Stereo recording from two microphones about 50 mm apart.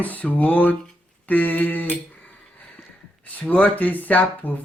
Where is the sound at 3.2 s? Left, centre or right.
Left.